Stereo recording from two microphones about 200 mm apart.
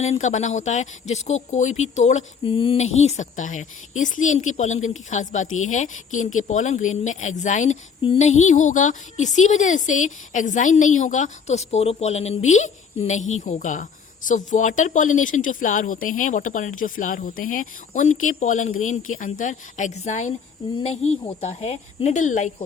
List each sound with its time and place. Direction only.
0.0 s speech: 35° left (ahead or behind)